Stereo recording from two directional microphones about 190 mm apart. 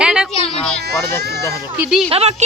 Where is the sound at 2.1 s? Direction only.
30° right (ahead or behind).